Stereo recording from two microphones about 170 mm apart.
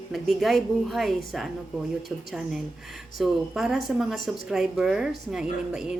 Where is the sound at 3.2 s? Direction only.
5° right (ahead or behind).